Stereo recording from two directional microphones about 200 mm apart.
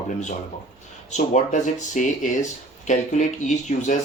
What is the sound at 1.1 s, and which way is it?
Speech, 35° left (ahead or behind).